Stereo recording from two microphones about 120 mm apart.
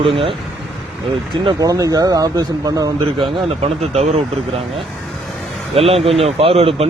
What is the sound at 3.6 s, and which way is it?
Speech, 60° right (ahead or behind).